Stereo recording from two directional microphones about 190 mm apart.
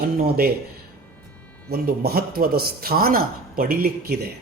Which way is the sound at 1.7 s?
55° right (ahead or behind).